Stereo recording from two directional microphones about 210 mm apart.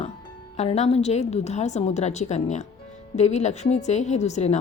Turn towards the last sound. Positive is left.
turn(degrees=35)  # may be behind; listen again after turning